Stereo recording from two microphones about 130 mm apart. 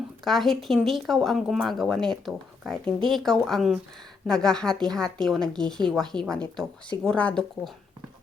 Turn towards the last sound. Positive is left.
turn(degrees=5)  # may be behind; listen again after turning